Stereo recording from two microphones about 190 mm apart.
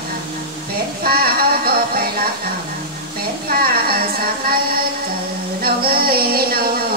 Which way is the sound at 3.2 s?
50° right (ahead or behind).